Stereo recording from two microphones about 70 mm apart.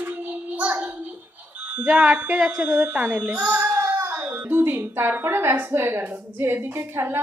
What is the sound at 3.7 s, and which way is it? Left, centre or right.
A woman's voice, right.